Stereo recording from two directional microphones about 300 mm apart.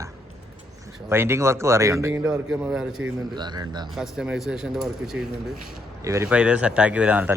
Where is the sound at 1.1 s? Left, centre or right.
Centre.